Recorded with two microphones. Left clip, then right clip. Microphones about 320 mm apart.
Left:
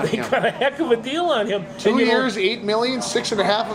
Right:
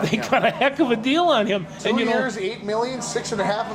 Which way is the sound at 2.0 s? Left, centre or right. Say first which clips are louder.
Left 4 dB; left.